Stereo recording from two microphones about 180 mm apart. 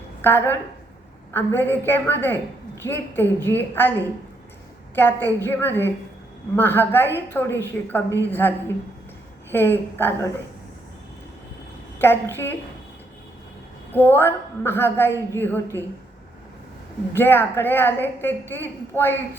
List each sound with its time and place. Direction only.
0.2 s a woman's voice: 10° left (ahead or behind)
4.9 s a woman's voice: 10° left (ahead or behind)
11.9 s a woman's voice: 10° left (ahead or behind)
13.9 s a woman's voice: 10° left (ahead or behind)
17.2 s a woman's voice: 10° left (ahead or behind)